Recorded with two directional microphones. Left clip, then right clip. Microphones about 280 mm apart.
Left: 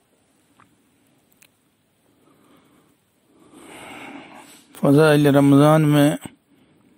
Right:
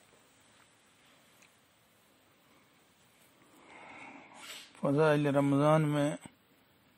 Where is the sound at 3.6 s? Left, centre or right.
Left.